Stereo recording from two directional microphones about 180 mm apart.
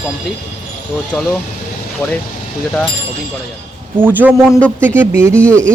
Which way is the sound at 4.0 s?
10° right (ahead or behind).